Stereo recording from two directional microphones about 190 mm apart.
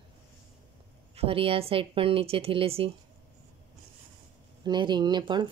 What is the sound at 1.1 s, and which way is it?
Speech, 30° right (ahead or behind).